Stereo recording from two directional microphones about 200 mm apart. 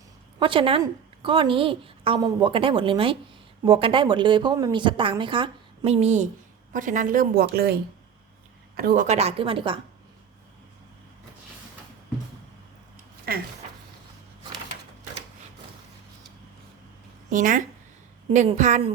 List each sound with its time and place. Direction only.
0.3 s a woman's voice: 25° right (ahead or behind)
13.3 s speech: 50° right (ahead or behind)
17.2 s a woman's voice: 40° right (ahead or behind)